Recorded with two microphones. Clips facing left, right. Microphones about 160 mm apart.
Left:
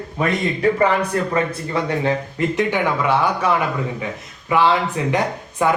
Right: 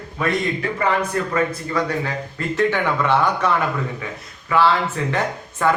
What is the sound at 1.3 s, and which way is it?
Speech, 25° left (ahead or behind).